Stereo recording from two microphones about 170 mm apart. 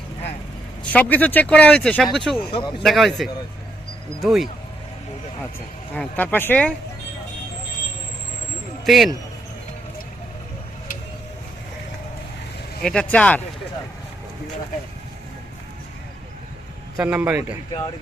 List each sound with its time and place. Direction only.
0.9 s speech: 10° left (ahead or behind)
2.5 s speech: 30° left (ahead or behind)
2.8 s speech: centre (ahead or behind)
5.9 s speech: 10° left (ahead or behind)
8.8 s speech: centre (ahead or behind)
12.8 s speech: 5° left (ahead or behind)
17.0 s a man's voice: 10° right (ahead or behind)